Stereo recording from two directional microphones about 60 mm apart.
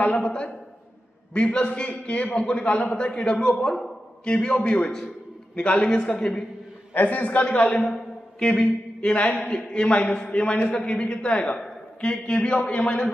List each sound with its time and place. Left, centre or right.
0.0 s a man's voice: left
6.9 s a man's voice: left
7.9 s mantra: centre
9.4 s a man's voice: centre